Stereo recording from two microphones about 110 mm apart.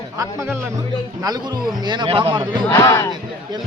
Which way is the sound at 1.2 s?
40° right (ahead or behind).